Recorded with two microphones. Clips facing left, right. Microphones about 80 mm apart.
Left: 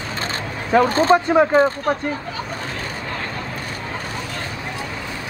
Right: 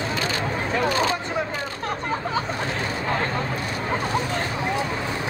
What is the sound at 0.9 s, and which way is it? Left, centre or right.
Speech, left.